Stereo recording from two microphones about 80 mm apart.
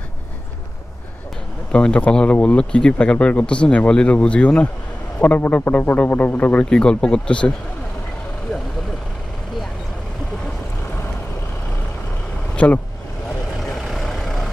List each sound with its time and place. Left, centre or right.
1.7 s speech: centre
12.5 s speech: centre
13.6 s vehicle: centre